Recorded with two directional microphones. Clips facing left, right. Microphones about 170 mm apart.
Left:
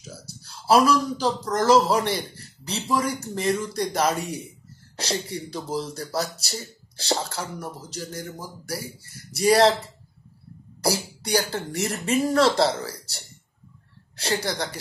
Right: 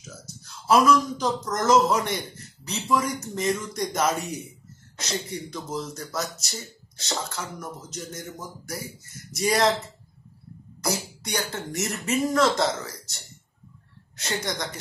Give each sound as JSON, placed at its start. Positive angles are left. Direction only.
{"t": 0.0, "sound": "speech", "side_deg": 30}
{"t": 10.8, "sound": "speech", "side_deg": 30}